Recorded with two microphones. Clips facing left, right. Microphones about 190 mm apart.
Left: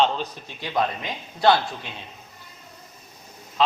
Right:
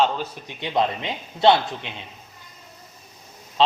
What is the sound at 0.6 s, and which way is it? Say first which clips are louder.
A man's voice: right 2 dB; 25° right (ahead or behind).